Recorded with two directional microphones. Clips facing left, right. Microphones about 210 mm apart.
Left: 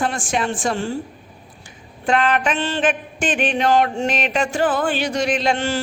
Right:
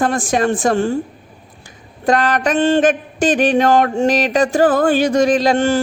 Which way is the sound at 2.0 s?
40° right (ahead or behind).